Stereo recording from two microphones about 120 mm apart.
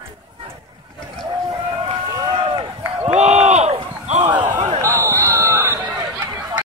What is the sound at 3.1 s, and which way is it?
Run, 70° right (ahead or behind).